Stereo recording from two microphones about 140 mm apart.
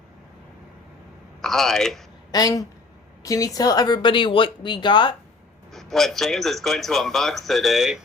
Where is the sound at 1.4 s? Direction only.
Centre (ahead or behind).